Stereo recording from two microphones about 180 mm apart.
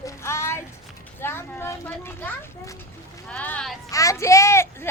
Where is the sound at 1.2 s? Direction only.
10° left (ahead or behind).